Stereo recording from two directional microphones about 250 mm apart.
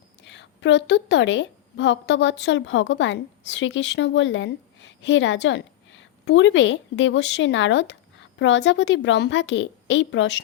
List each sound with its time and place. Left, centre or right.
0.3 s a woman's voice: left